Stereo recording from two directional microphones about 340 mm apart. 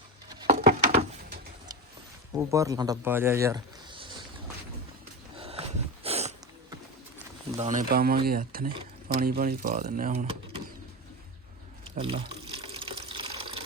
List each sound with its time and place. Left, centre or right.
0.3 s a sound: centre
0.5 s a sound: right
2.3 s speech: centre
5.4 s dog: centre
7.5 s speech: centre
11.9 s speech: centre
12.6 s water: centre